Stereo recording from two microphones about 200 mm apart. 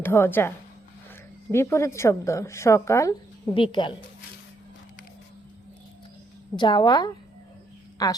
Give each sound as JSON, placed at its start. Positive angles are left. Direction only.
{"t": 0.0, "sound": "a woman's voice", "side_deg": 10}
{"t": 6.6, "sound": "a woman's voice", "side_deg": 25}